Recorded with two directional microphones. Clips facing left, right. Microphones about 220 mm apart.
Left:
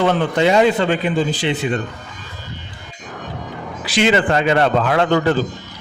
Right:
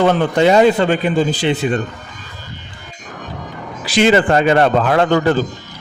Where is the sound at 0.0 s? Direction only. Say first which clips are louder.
Right 3 dB; 45° right (ahead or behind).